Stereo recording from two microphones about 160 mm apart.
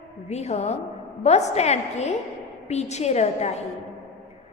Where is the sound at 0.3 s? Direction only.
45° left (ahead or behind).